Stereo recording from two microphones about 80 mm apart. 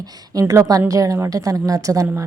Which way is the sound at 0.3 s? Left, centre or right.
Right.